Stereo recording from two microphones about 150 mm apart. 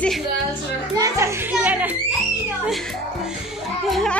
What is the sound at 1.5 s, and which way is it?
Speech, 10° right (ahead or behind).